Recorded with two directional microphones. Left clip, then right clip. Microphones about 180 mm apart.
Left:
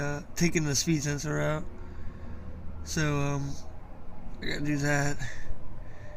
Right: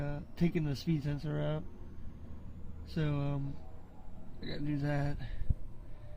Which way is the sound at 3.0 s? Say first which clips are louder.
Left 8 dB; 30° right (ahead or behind).